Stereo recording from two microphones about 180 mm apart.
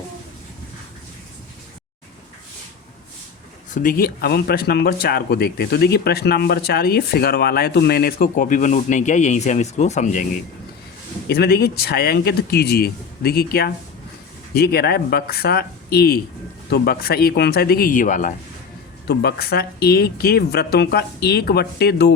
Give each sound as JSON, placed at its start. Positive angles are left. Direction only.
{"t": 3.7, "sound": "speech", "side_deg": 50}
{"t": 11.3, "sound": "speech", "side_deg": 60}
{"t": 19.0, "sound": "speech", "side_deg": 60}